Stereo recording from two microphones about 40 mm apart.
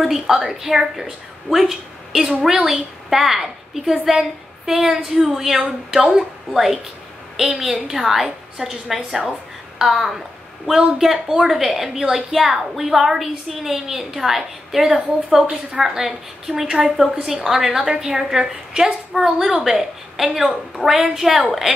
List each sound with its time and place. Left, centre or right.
0.0 s a woman's voice: centre
17.6 s a woman's voice: centre